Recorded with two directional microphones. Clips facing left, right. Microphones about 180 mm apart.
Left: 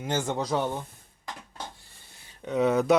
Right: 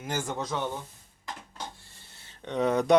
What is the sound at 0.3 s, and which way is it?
Speech, 35° left (ahead or behind).